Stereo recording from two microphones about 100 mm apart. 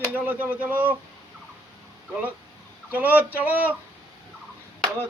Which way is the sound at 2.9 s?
20° right (ahead or behind).